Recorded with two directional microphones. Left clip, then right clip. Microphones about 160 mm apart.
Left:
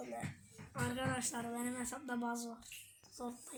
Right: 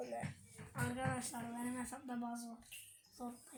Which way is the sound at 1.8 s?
30° left (ahead or behind).